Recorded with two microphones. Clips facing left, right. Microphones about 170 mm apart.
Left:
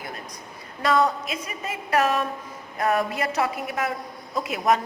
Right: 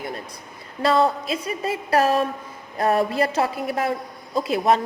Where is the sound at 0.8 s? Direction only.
30° right (ahead or behind).